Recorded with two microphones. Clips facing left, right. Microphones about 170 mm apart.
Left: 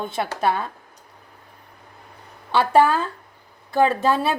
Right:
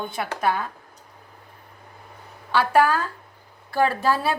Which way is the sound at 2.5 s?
25° left (ahead or behind).